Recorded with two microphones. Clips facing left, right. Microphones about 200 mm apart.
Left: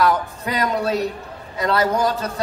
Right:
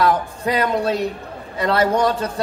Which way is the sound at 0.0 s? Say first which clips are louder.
Right 1 dB; 30° right (ahead or behind).